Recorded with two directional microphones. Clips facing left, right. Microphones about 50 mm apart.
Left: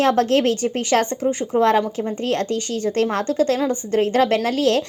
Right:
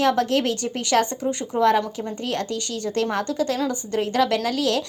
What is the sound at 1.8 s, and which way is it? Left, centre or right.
Speech, centre.